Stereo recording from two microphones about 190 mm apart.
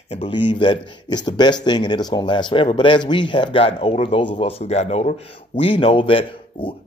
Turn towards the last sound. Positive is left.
turn(degrees=25)  # may be behind; listen again after turning